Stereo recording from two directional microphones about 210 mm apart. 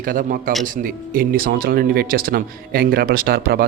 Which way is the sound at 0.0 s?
40° right (ahead or behind).